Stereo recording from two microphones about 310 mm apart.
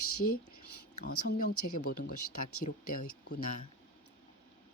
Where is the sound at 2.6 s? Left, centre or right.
Left.